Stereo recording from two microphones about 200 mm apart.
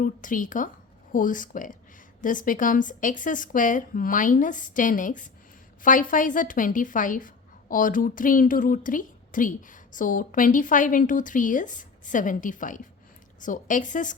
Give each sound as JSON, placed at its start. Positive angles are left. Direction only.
{"t": 0.0, "sound": "a woman's voice", "side_deg": 40}